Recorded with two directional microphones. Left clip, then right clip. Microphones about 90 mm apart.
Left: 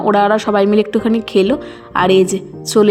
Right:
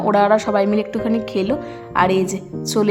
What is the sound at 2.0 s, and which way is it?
Speech, 40° left (ahead or behind).